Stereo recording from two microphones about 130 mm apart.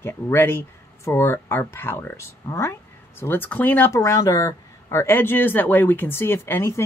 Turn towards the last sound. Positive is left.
turn(degrees=20)  # may be behind; listen again after turning